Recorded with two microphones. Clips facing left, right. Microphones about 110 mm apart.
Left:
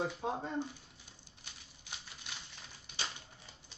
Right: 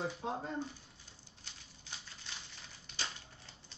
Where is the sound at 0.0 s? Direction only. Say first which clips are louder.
Left 2 dB; 15° left (ahead or behind).